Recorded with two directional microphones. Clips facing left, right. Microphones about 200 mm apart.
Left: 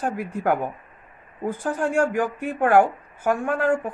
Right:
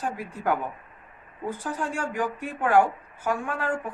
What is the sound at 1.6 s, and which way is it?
Speech, 50° left (ahead or behind).